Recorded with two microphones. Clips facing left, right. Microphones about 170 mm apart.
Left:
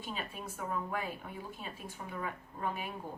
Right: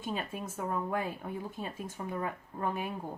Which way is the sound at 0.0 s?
45° right (ahead or behind).